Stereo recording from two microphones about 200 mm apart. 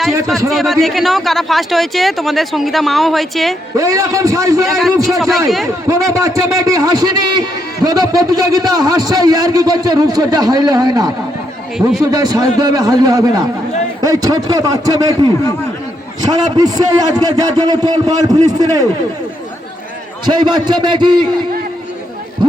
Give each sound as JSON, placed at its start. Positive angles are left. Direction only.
{"t": 0.5, "sound": "speech", "side_deg": 0}
{"t": 3.8, "sound": "a man's voice", "side_deg": -15}
{"t": 4.6, "sound": "speech", "side_deg": 0}
{"t": 4.9, "sound": "a man's voice", "side_deg": -15}
{"t": 20.2, "sound": "a man's voice", "side_deg": -20}